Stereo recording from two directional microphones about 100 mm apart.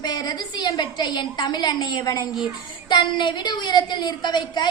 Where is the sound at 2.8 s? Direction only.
50° left (ahead or behind).